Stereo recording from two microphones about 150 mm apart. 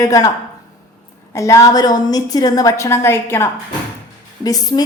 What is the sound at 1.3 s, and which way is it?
A woman's voice, 20° left (ahead or behind).